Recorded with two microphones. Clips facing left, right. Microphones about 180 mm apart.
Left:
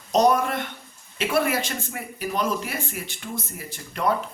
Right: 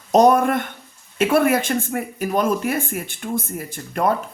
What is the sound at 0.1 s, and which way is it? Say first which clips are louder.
Speech: right 5 dB; 50° right (ahead or behind).